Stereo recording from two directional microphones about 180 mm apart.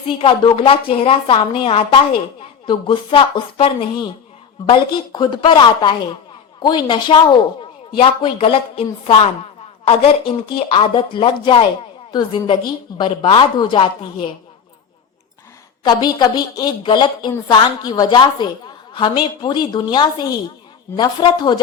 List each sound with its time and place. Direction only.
0.2 s a woman's voice: 30° left (ahead or behind)
15.8 s a woman's voice: 25° left (ahead or behind)